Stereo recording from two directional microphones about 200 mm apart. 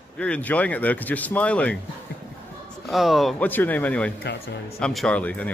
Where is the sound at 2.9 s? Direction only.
Centre (ahead or behind).